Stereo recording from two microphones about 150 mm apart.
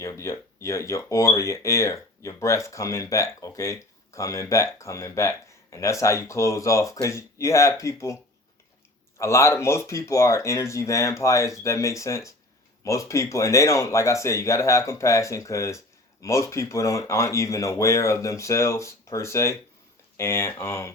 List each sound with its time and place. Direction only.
0.0 s speech: 20° left (ahead or behind)